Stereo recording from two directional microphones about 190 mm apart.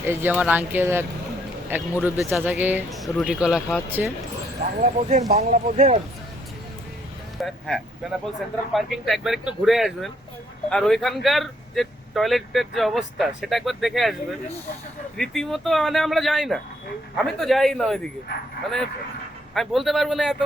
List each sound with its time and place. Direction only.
0.0 s speech: 10° right (ahead or behind)
4.6 s speech: 35° right (ahead or behind)
7.3 s speech: centre (ahead or behind)